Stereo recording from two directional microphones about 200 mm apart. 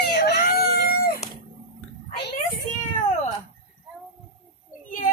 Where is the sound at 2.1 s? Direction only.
45° left (ahead or behind).